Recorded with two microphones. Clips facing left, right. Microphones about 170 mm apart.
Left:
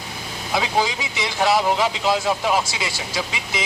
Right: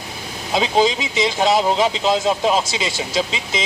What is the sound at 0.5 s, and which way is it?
Speech, 25° right (ahead or behind).